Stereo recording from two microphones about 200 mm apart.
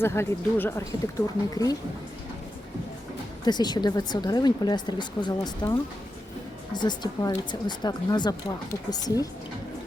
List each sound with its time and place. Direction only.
0.0 s speech: 10° left (ahead or behind)
3.4 s speech: 20° left (ahead or behind)